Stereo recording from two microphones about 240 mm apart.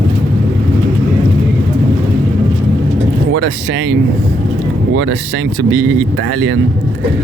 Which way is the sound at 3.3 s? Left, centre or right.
Right.